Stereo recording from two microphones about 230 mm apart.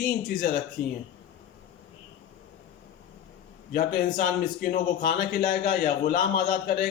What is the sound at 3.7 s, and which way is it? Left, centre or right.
A man's voice, left.